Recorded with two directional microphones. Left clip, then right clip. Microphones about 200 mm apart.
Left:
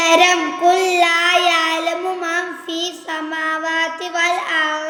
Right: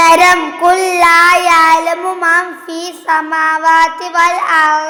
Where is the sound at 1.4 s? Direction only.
20° left (ahead or behind).